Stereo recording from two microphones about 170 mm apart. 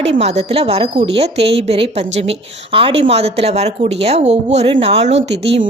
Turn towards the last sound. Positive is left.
turn(degrees=-40)  # may be behind; listen again after turning